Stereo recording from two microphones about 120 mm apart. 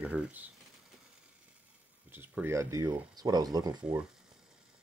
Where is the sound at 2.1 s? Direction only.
15° right (ahead or behind); by 3.8 s 35° right (ahead or behind).